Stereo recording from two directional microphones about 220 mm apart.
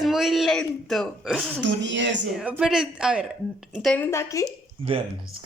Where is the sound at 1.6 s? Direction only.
55° right (ahead or behind).